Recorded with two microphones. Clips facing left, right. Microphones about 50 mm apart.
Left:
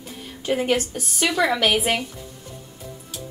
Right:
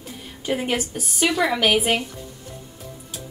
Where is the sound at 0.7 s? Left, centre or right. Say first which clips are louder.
Left 3 dB; centre.